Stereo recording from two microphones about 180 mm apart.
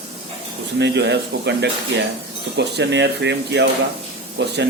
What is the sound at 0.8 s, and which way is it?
A man's voice, 70° right (ahead or behind).